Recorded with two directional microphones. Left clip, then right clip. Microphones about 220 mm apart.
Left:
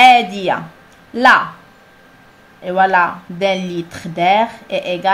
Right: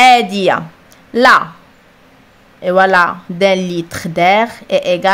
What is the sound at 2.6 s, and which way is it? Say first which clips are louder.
Speech: right 3 dB; 45° right (ahead or behind).